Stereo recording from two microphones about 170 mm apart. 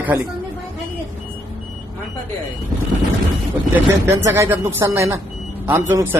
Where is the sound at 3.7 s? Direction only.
15° right (ahead or behind).